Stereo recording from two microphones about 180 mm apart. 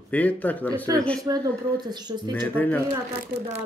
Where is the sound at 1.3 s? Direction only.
20° right (ahead or behind).